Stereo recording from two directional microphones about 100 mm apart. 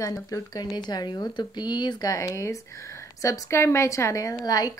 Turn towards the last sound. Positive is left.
turn(degrees=40)  # may be behind; listen again after turning